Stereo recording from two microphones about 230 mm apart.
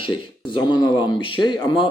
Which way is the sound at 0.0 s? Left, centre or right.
Left.